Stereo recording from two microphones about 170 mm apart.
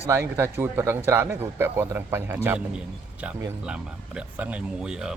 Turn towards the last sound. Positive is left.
turn(degrees=-5)  # may be behind; listen again after turning